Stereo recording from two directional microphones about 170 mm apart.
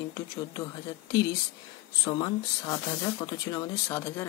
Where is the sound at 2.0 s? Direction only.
25° left (ahead or behind).